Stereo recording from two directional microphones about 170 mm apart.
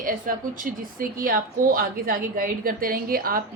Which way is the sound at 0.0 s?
55° right (ahead or behind).